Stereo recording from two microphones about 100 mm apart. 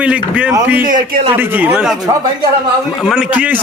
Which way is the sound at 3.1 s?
15° right (ahead or behind).